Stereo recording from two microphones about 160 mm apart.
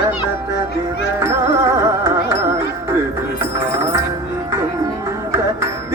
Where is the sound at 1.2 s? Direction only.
15° right (ahead or behind).